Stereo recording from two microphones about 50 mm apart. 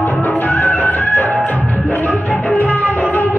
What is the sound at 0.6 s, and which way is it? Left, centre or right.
Music, left.